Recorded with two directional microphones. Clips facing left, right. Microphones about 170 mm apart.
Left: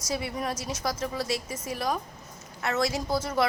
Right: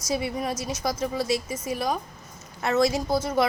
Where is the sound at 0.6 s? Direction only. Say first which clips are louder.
Right 3 dB; 35° left (ahead or behind).